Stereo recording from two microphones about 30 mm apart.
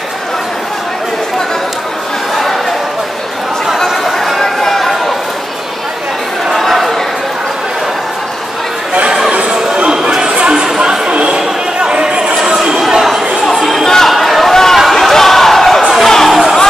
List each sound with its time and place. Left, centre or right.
3.8 s chatter: centre
4.4 s chatter: centre
6.6 s chatter: centre
10.2 s chatter: right
13.5 s chatter: centre
13.8 s a sound: centre
14.1 s chatter: centre
14.5 s chatter: centre
14.9 s a sound: centre
16.0 s music: centre
16.3 s music: centre